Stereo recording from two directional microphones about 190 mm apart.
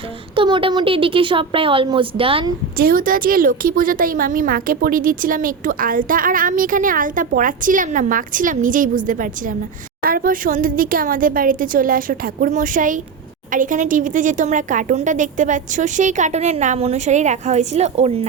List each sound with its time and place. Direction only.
0.3 s speech: 25° right (ahead or behind)
2.7 s a woman's voice: 50° right (ahead or behind); by 18.3 s 35° right (ahead or behind)